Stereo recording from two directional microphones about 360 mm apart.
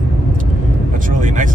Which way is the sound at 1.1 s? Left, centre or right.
Right.